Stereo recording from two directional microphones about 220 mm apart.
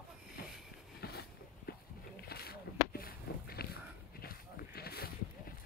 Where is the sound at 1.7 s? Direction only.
45° left (ahead or behind).